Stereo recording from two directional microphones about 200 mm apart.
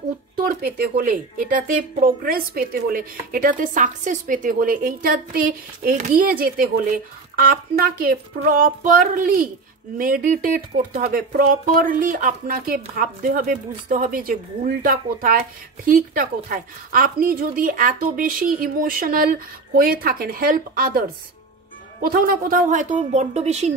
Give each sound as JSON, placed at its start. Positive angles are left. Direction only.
{"t": 0.4, "sound": "speech", "side_deg": -50}
{"t": 22.0, "sound": "speech", "side_deg": -45}